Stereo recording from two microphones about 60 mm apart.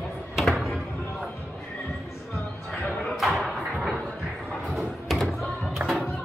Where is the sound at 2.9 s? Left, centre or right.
Centre.